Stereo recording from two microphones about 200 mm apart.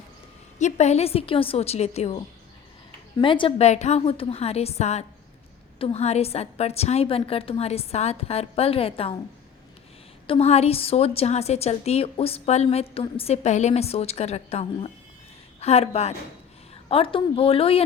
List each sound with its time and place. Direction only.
0.6 s a woman's voice: 35° left (ahead or behind)
10.2 s a woman's voice: 30° left (ahead or behind)